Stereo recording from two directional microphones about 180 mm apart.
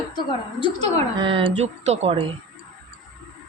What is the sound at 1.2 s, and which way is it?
A woman's voice, 30° right (ahead or behind).